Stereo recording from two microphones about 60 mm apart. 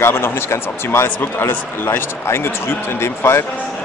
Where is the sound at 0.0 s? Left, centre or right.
Left.